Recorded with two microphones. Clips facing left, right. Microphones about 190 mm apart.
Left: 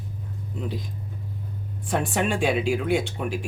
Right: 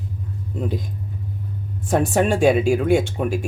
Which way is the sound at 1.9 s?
45° right (ahead or behind).